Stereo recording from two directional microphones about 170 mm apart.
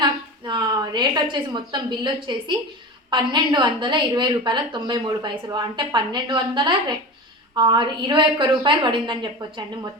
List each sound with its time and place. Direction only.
0.0 s a woman's voice: 25° right (ahead or behind)